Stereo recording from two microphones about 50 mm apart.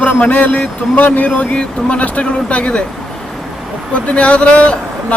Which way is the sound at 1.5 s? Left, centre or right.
Left.